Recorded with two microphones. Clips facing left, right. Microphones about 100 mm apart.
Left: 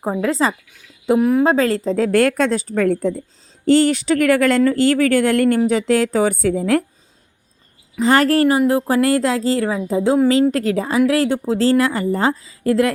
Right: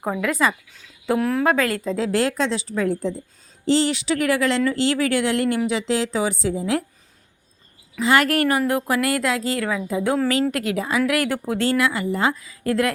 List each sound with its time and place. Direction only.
0.0 s speech: 25° left (ahead or behind)
1.0 s a woman's voice: 15° left (ahead or behind)
1.5 s speech: 30° left (ahead or behind)
2.0 s speech: 55° left (ahead or behind)
7.9 s speech: 35° left (ahead or behind)